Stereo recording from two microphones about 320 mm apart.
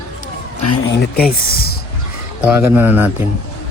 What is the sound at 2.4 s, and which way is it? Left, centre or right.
Speech, centre.